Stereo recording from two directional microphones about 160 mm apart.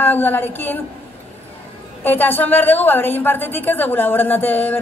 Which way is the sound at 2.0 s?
10° left (ahead or behind).